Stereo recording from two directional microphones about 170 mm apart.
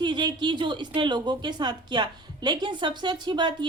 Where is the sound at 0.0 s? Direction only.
25° right (ahead or behind).